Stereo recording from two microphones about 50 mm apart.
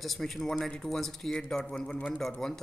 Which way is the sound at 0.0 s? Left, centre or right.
Centre.